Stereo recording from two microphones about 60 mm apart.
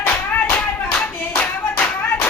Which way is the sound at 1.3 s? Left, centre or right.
Left.